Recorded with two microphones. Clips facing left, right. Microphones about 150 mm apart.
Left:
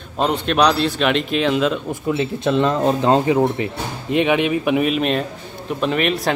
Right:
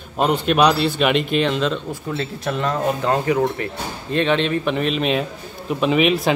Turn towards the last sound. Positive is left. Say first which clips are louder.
# right 2 dB
turn(degrees=0)  # may be behind; listen again after turning